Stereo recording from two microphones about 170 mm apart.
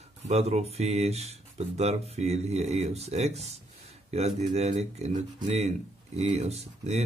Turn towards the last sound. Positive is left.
turn(degrees=-40)  # may be behind; listen again after turning